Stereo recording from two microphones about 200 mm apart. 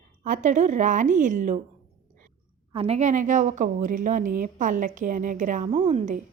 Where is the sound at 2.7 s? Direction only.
30° right (ahead or behind).